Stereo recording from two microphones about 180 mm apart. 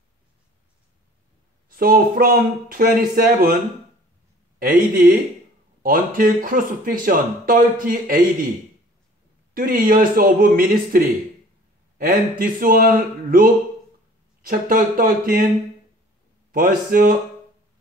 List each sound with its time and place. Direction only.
1.7 s speech: 55° right (ahead or behind)
4.6 s speech: 50° right (ahead or behind)
9.5 s speech: 55° right (ahead or behind)
16.5 s speech: 50° right (ahead or behind)